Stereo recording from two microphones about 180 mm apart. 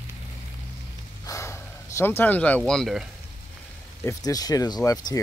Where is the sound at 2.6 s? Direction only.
Centre (ahead or behind).